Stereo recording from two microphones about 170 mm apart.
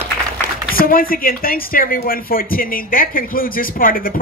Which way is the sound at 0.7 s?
60° left (ahead or behind).